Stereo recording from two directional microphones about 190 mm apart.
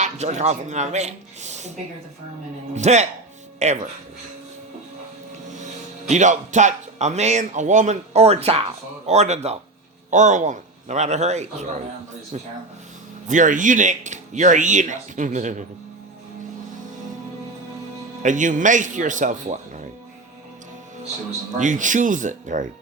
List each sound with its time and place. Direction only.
0.0 s speech: 35° right (ahead or behind)
2.7 s speech: 35° right (ahead or behind)
5.5 s speech: 40° right (ahead or behind)
18.2 s speech: 40° right (ahead or behind)
21.6 s speech: 40° right (ahead or behind)